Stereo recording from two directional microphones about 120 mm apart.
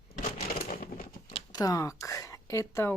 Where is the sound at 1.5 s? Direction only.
30° left (ahead or behind).